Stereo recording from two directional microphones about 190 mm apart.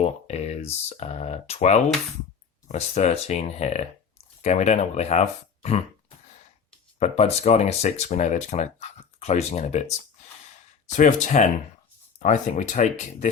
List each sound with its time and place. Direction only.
0.0 s speech: 35° left (ahead or behind)
7.0 s speech: 35° left (ahead or behind)
10.9 s speech: 40° left (ahead or behind)